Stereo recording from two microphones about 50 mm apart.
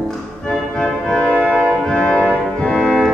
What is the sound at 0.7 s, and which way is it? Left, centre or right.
Organ, centre.